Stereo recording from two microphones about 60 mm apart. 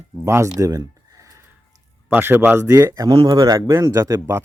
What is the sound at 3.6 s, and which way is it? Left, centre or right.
Speech, right.